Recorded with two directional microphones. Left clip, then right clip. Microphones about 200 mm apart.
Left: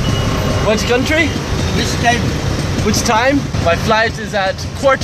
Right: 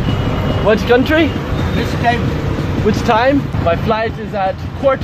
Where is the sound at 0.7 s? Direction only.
30° right (ahead or behind).